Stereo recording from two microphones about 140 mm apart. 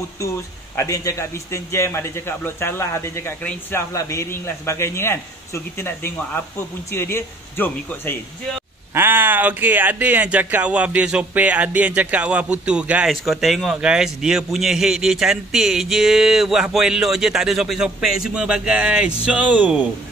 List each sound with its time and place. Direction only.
0.7 s a man's voice: 20° left (ahead or behind)
8.9 s speech: 15° right (ahead or behind)